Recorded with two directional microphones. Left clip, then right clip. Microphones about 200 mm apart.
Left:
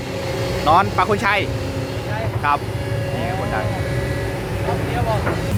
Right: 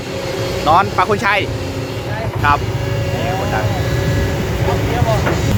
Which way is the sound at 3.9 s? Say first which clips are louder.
Right 4 dB; 60° right (ahead or behind).